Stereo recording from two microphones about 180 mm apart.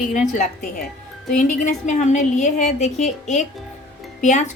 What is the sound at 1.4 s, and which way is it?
A woman's voice, 45° left (ahead or behind).